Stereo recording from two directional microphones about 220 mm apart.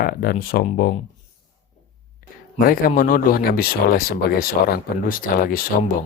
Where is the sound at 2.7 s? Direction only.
40° left (ahead or behind).